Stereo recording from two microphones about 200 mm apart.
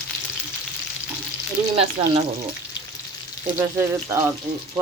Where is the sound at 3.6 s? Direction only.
15° right (ahead or behind).